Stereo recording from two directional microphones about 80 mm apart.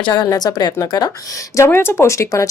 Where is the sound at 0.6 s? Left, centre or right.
Left.